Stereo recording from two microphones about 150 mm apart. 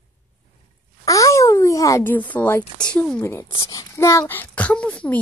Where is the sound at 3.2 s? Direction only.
15° left (ahead or behind).